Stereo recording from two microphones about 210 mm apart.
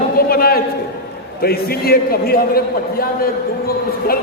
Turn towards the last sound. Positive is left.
turn(degrees=45)  # may be behind; listen again after turning